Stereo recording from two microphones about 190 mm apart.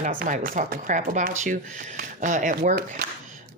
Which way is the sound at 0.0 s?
45° right (ahead or behind).